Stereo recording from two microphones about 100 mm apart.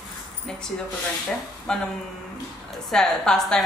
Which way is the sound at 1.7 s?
10° left (ahead or behind).